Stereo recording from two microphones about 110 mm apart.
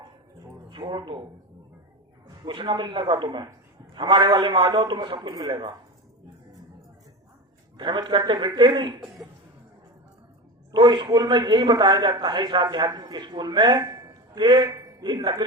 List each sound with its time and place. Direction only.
0.7 s a man's voice: 45° right (ahead or behind)
2.2 s a man's voice: 40° right (ahead or behind)
7.8 s a man's voice: 45° right (ahead or behind)
10.7 s a man's voice: 40° right (ahead or behind)